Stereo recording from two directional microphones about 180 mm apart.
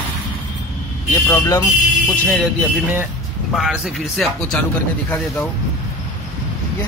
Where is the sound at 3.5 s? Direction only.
Centre (ahead or behind).